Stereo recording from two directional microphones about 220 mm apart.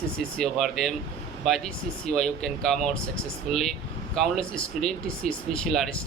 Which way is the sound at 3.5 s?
30° left (ahead or behind).